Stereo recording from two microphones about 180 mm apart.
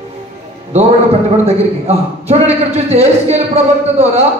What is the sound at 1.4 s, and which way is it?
A man's voice, 35° right (ahead or behind).